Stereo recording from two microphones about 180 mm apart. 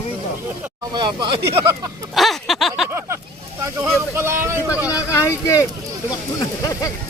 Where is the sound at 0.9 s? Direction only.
25° right (ahead or behind).